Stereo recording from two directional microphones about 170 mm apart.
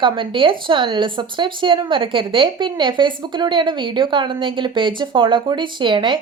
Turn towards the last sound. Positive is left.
turn(degrees=-30)  # may be behind; listen again after turning